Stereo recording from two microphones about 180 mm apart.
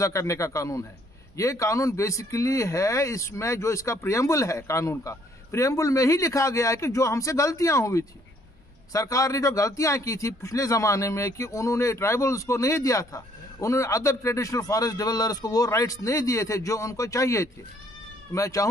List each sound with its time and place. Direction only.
0.0 s a man's voice: 15° left (ahead or behind)